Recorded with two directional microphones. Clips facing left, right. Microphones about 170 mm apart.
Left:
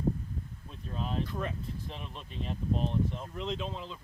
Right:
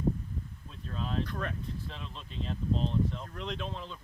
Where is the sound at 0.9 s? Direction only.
15° left (ahead or behind).